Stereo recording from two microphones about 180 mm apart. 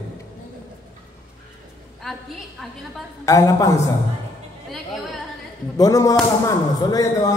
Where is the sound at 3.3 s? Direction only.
15° left (ahead or behind).